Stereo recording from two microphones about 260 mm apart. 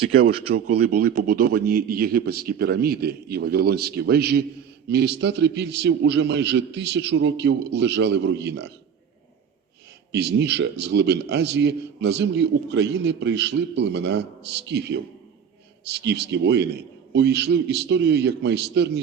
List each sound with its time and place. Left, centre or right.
0.5 s a man's voice: right
10.1 s a man's voice: right